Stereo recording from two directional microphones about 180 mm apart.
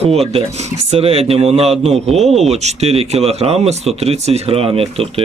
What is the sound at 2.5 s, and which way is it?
Speech, 35° right (ahead or behind).